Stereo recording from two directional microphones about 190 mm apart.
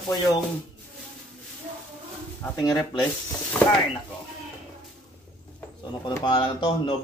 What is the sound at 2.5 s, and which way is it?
Speech, 20° left (ahead or behind).